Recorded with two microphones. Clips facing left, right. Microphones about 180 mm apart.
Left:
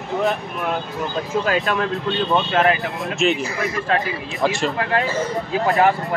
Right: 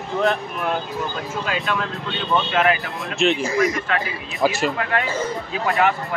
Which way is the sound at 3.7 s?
30° left (ahead or behind).